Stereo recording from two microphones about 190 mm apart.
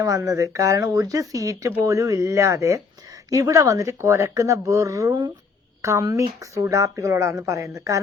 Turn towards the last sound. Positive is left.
turn(degrees=-15)  # may be behind; listen again after turning